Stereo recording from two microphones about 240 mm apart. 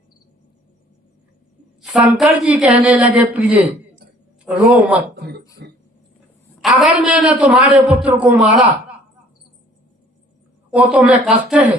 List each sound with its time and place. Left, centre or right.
1.8 s a man's voice: centre
5.1 s throat clearing: right
5.6 s a sound: right
6.6 s a man's voice: centre
10.7 s a man's voice: centre